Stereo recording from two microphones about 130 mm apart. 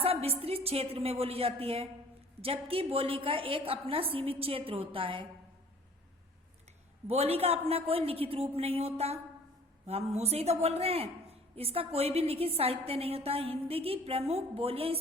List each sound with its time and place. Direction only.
0.0 s a woman's voice: 50° right (ahead or behind)
7.1 s a woman's voice: 50° right (ahead or behind)